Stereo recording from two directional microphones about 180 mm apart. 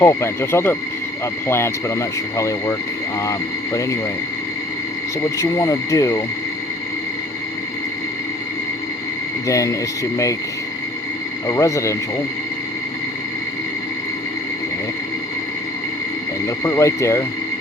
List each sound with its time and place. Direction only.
0.0 s speech: 15° left (ahead or behind)
5.4 s speech: 20° left (ahead or behind)
9.5 s speech: 20° left (ahead or behind)
11.4 s speech: 15° left (ahead or behind)
16.5 s speech: 20° left (ahead or behind)